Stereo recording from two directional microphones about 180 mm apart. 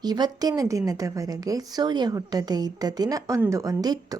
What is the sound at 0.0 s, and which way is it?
A woman's voice, 20° right (ahead or behind).